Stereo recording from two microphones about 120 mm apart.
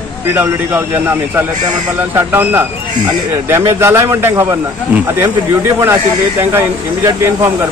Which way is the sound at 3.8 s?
20° right (ahead or behind).